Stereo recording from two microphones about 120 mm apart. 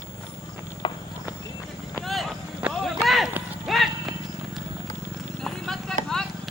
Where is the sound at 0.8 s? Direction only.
40° left (ahead or behind).